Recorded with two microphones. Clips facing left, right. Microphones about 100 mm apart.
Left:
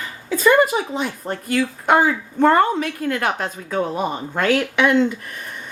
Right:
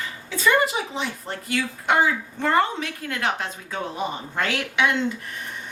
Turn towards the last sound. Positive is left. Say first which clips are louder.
# left 6 dB
turn(degrees=50)  # may be behind; listen again after turning